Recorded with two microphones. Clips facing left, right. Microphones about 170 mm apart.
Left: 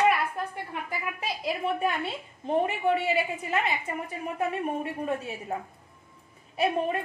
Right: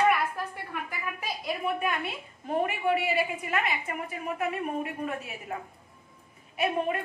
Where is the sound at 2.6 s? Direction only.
25° left (ahead or behind).